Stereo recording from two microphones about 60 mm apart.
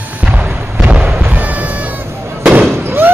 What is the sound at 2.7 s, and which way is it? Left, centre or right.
Fireworks, right.